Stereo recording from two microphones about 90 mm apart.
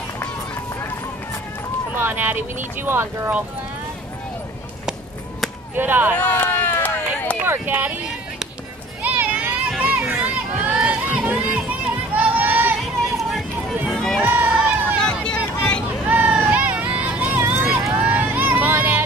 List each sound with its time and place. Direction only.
2.0 s speech: 20° right (ahead or behind)
5.8 s speech: 20° right (ahead or behind)
6.1 s run: 20° left (ahead or behind)
7.4 s speech: 25° right (ahead or behind)
9.0 s vehicle: 20° right (ahead or behind)
9.7 s crowd: 10° right (ahead or behind)
12.1 s a sound: 20° right (ahead or behind)
13.0 s music: centre (ahead or behind)
13.8 s run: 5° left (ahead or behind)
14.2 s run: 20° right (ahead or behind)
15.0 s a sound: 10° left (ahead or behind)
16.1 s a sound: 15° right (ahead or behind)
17.6 s vehicle: 10° right (ahead or behind)